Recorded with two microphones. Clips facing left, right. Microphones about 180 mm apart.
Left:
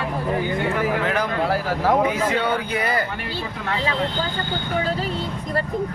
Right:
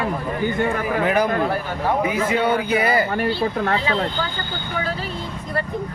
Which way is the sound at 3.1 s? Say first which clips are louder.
Right 9 dB; 45° right (ahead or behind).